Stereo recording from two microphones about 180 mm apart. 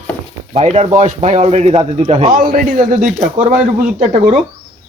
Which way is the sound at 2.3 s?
50° right (ahead or behind).